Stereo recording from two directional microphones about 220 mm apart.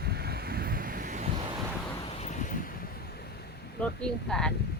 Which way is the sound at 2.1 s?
30° left (ahead or behind).